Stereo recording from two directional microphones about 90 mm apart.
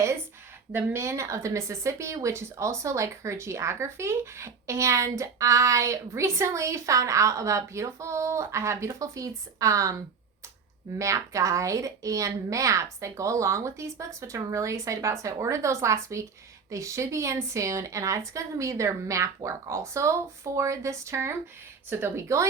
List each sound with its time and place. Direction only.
0.7 s a woman's voice: 25° right (ahead or behind)
10.9 s a woman's voice: 35° right (ahead or behind)